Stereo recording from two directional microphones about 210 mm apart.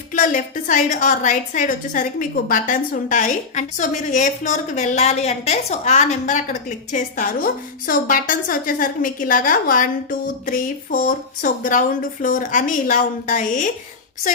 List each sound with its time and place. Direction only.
0.1 s a woman's voice: 40° left (ahead or behind)